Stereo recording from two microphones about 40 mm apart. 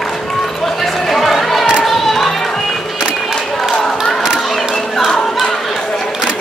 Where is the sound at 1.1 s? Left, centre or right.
Centre.